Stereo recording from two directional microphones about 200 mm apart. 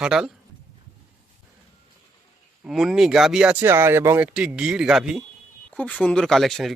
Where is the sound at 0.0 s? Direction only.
5° right (ahead or behind).